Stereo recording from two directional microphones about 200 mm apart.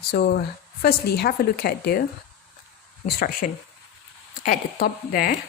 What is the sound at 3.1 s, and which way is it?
Speech, 45° left (ahead or behind).